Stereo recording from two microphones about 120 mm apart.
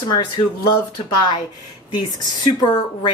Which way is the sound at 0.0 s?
35° left (ahead or behind).